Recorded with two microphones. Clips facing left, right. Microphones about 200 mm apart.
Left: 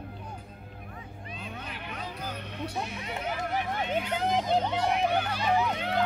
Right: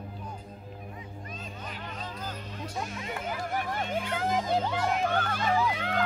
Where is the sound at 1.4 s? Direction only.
65° left (ahead or behind).